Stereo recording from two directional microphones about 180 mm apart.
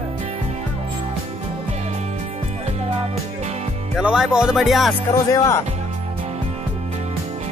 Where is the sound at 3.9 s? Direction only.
Centre (ahead or behind).